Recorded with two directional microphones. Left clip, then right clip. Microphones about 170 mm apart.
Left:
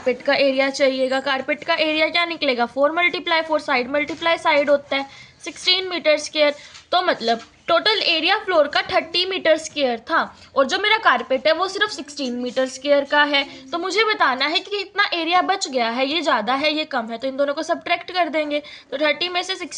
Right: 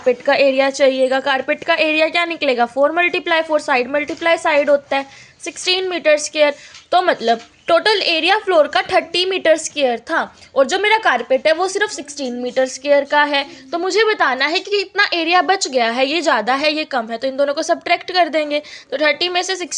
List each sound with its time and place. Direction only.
0.0 s a woman's voice: 40° right (ahead or behind)